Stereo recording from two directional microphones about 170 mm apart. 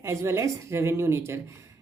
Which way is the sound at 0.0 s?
15° right (ahead or behind).